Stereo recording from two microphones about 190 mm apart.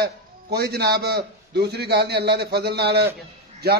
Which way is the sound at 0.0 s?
60° right (ahead or behind).